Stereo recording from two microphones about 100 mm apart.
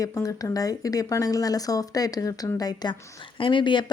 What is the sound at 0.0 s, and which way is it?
Speech, 35° left (ahead or behind).